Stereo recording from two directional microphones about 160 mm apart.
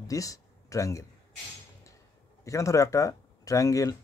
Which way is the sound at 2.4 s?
20° left (ahead or behind).